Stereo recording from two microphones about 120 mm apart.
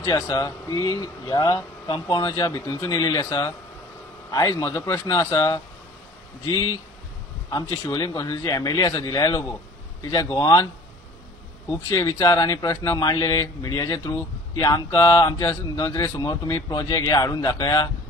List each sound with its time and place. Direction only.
0.0 s speech: 35° left (ahead or behind)
7.4 s speech: 35° left (ahead or behind)
11.9 s speech: 30° left (ahead or behind)